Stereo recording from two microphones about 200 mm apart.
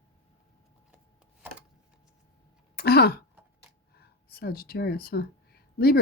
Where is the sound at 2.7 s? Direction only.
50° left (ahead or behind).